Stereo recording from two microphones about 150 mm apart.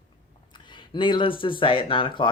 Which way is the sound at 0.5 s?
30° left (ahead or behind).